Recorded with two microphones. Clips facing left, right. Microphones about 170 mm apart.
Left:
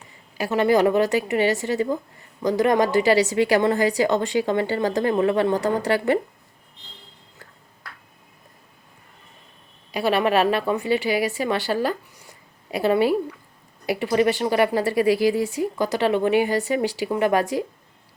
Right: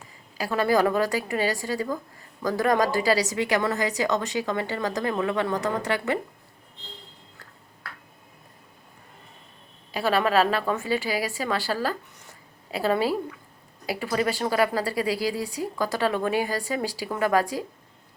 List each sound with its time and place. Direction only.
0.3 s a woman's voice: 20° left (ahead or behind)
9.9 s a woman's voice: 15° left (ahead or behind)